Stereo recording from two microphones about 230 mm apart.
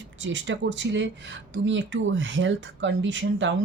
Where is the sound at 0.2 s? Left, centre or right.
Right.